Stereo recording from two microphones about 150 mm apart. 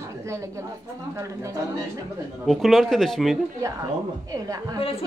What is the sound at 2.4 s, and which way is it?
Speech, centre (ahead or behind).